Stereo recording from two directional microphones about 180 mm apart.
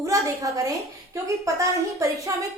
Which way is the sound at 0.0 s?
20° right (ahead or behind).